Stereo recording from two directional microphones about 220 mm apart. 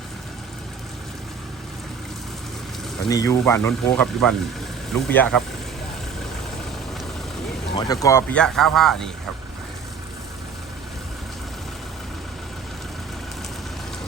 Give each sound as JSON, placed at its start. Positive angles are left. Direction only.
{"t": 3.1, "sound": "speech", "side_deg": 15}
{"t": 7.8, "sound": "speech", "side_deg": 15}